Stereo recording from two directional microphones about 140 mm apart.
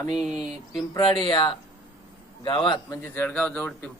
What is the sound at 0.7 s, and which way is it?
Speech, 35° left (ahead or behind).